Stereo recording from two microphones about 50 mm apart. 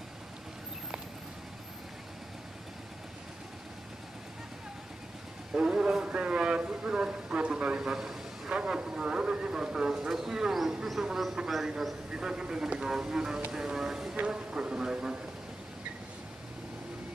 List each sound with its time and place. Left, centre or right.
5.5 s a sound: centre
7.8 s a man's voice: centre
14.1 s a man's voice: right